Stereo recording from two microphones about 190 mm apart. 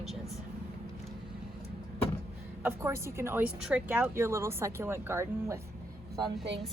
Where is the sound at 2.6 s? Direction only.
15° right (ahead or behind).